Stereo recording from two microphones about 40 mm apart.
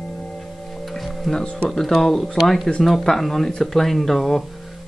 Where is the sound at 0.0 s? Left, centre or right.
Centre.